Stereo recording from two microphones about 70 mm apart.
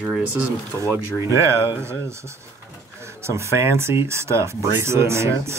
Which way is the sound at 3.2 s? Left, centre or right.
Right.